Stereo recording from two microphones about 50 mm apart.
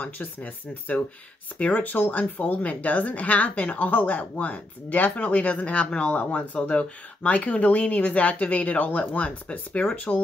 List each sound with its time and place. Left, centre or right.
0.0 s a woman's voice: left